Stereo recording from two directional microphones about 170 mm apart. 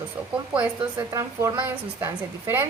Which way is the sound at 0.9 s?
20° right (ahead or behind).